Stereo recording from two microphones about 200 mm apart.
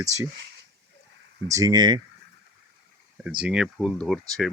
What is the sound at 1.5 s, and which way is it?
Speech, 15° right (ahead or behind).